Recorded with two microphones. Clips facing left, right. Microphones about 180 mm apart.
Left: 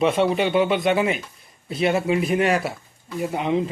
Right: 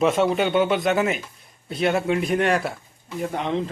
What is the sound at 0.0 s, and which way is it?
A man's voice, centre (ahead or behind).